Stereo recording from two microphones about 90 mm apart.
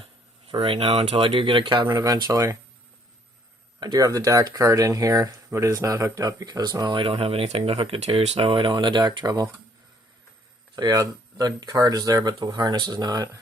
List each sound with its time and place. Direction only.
0.0 s speech: 90° right; by 1.9 s 65° right (ahead or behind)
1.9 s speech: 50° right (ahead or behind)
3.8 s speech: 50° right (ahead or behind)
10.8 s speech: 45° right (ahead or behind)